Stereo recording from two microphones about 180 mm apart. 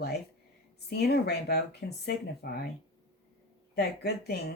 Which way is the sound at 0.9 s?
65° left (ahead or behind).